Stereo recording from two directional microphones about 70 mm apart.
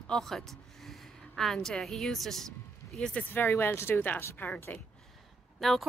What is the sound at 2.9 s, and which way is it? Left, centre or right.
Speech, centre.